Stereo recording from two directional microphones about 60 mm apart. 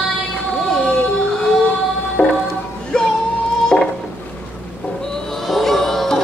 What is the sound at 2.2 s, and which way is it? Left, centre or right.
Music, left.